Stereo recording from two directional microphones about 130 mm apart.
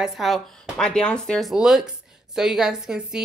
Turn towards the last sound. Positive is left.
turn(degrees=-5)  # may be behind; listen again after turning